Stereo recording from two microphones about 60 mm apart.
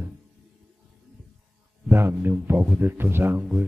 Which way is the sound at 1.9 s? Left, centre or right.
Right.